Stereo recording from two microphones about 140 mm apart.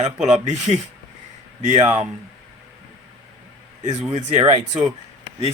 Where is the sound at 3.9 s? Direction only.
50° right (ahead or behind).